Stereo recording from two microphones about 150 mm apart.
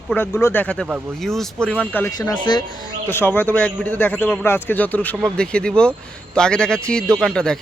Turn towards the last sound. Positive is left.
turn(degrees=5)  # may be behind; listen again after turning